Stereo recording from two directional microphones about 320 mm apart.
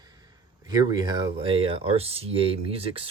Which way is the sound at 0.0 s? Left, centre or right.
Centre.